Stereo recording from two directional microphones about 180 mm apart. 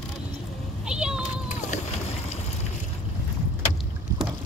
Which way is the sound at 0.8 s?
5° right (ahead or behind).